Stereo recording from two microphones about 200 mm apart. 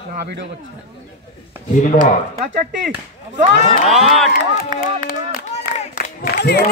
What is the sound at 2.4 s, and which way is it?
Speech, 35° right (ahead or behind).